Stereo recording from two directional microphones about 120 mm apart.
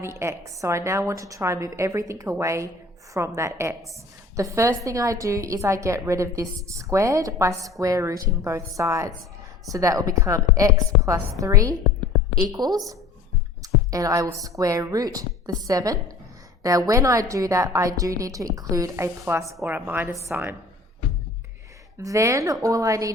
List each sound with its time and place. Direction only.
0.0 s a woman's voice: 20° right (ahead or behind)
21.9 s a woman's voice: 25° right (ahead or behind)